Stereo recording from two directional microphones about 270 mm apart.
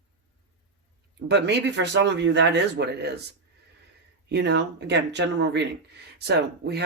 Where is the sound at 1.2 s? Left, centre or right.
Right.